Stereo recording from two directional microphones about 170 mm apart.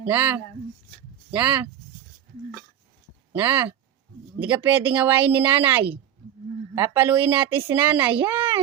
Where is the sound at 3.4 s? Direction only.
15° right (ahead or behind).